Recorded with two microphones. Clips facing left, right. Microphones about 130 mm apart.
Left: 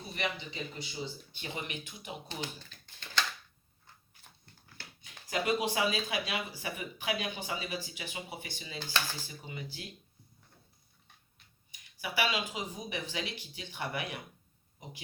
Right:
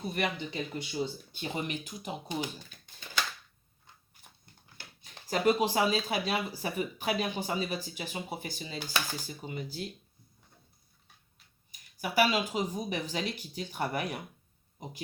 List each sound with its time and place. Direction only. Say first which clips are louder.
0.1 s speech: right 3 dB; 50° right (ahead or behind)
2.2 s speech: right 5 dB; 15° right (ahead or behind)
5.0 s speech: right 5 dB; 35° right (ahead or behind)
11.7 s speech: right 6 dB; 40° right (ahead or behind)